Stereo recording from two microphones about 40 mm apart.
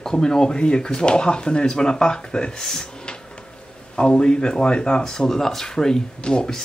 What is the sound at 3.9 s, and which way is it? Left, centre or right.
Speech, left.